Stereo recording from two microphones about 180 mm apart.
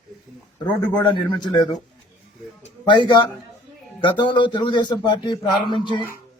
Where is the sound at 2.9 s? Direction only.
25° left (ahead or behind).